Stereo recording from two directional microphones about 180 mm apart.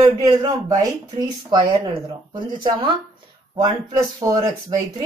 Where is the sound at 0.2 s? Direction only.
25° right (ahead or behind).